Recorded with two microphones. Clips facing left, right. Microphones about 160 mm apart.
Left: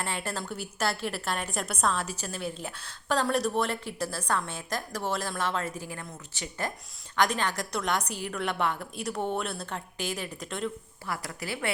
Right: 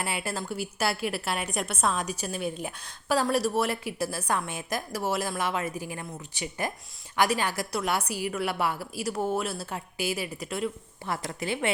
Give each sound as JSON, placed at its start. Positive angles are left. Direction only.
{"t": 0.0, "sound": "a woman's voice", "side_deg": -10}
{"t": 11.0, "sound": "a woman's voice", "side_deg": -25}